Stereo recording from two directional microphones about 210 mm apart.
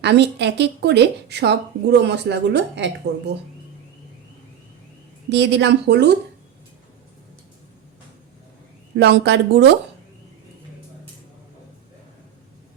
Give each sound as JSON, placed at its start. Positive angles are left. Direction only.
{"t": 0.0, "sound": "a woman's voice", "side_deg": -55}
{"t": 5.3, "sound": "a woman's voice", "side_deg": -55}
{"t": 9.0, "sound": "a woman's voice", "side_deg": -55}